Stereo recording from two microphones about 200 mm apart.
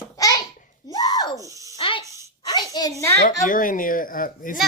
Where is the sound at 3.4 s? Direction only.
40° left (ahead or behind).